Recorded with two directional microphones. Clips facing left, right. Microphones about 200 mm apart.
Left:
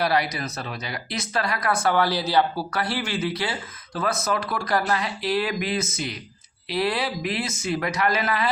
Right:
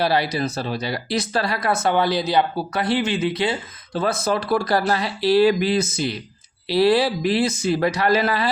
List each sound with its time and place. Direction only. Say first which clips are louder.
0.0 s speech: right 3 dB; 30° right (ahead or behind)